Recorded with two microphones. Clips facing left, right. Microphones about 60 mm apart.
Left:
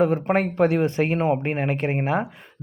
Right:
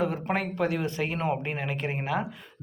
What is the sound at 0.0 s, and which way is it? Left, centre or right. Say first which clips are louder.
Speech: left 8 dB; left.